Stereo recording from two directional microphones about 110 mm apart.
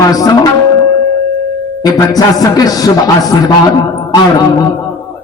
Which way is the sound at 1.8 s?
35° left (ahead or behind).